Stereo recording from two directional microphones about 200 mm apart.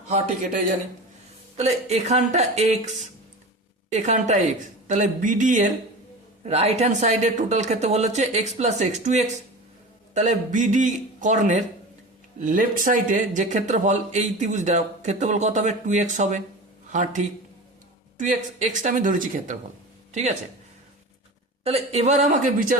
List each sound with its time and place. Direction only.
1.5 s speech: 35° right (ahead or behind)
21.6 s speech: 30° right (ahead or behind)